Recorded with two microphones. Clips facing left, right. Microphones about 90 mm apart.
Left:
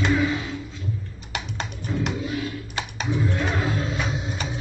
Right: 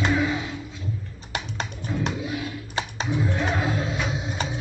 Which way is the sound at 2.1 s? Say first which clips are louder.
Left 2 dB; 5° right (ahead or behind).